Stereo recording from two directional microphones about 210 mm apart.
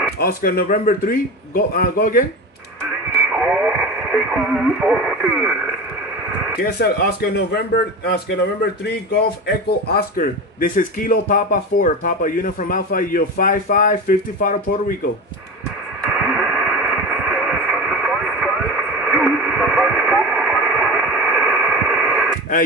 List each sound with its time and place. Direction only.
0.2 s a man's voice: 45° left (ahead or behind)
3.3 s speech: 5° right (ahead or behind)
6.6 s a man's voice: 50° left (ahead or behind)
16.3 s radio: 5° right (ahead or behind)